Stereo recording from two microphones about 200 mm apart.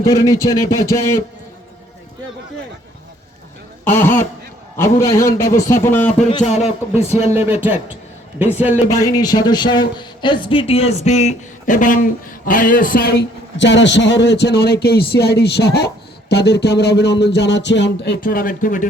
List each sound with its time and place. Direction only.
0.0 s a man's voice: 15° left (ahead or behind)
3.8 s a man's voice: 10° left (ahead or behind)
7.0 s speech: 30° left (ahead or behind)
8.4 s a man's voice: 10° right (ahead or behind)
8.9 s speech: 15° left (ahead or behind); by 18.9 s 40° left (ahead or behind)